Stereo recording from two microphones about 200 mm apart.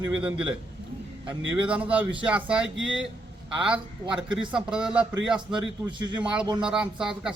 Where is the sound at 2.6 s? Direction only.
70° right (ahead or behind).